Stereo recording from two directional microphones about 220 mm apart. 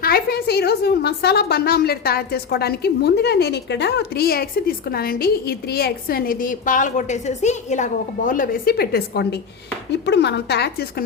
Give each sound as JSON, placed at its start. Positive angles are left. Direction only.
{"t": 0.0, "sound": "a woman's voice", "side_deg": 45}